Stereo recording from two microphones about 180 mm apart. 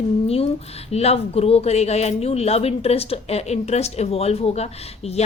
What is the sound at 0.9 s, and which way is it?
A woman's voice, 35° left (ahead or behind).